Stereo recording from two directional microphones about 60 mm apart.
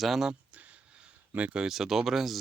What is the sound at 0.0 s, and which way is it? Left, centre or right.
Speech, centre.